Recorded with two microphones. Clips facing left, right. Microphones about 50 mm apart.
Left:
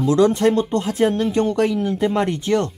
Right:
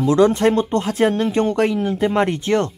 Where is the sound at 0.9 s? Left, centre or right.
Right.